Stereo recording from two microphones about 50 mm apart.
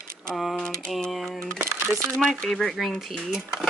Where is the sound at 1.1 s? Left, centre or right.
Centre.